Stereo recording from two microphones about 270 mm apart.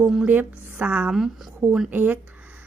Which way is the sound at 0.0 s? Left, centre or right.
Centre.